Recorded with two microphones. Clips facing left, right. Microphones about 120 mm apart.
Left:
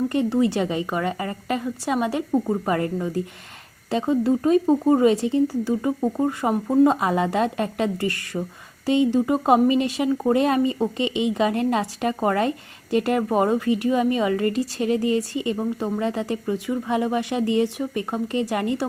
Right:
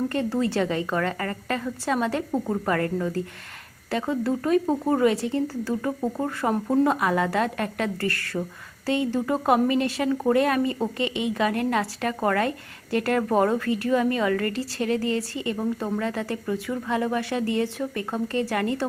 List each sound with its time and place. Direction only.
0.1 s a woman's voice: 15° left (ahead or behind)